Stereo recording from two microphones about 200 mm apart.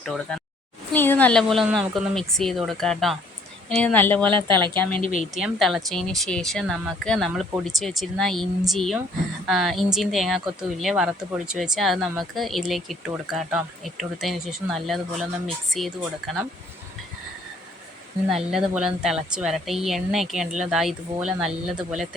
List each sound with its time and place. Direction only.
0.0 s a woman's voice: 5° left (ahead or behind)
4.3 s speech: 25° right (ahead or behind)
4.8 s a woman's voice: 5° left (ahead or behind)
18.3 s speech: centre (ahead or behind)